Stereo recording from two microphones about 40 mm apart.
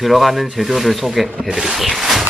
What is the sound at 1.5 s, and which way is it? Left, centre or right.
Speech, centre.